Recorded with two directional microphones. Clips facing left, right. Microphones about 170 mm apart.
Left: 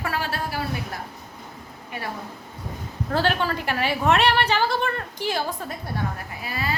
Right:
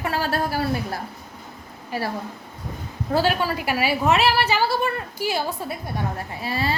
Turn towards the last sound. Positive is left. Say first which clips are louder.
# right 4 dB
turn(degrees=-30)  # may be behind; listen again after turning